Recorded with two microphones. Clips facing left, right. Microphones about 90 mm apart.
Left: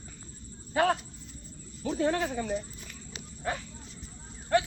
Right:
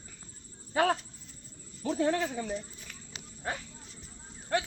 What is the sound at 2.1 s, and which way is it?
Speech, 45° left (ahead or behind).